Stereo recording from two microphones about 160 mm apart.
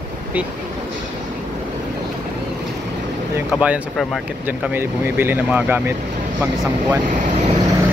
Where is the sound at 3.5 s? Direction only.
10° right (ahead or behind).